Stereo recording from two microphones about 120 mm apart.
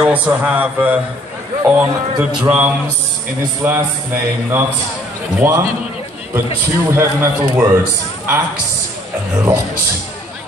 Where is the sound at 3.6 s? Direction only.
20° right (ahead or behind).